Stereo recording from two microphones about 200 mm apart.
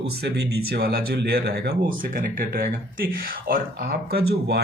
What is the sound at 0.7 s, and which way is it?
Speech, 50° right (ahead or behind).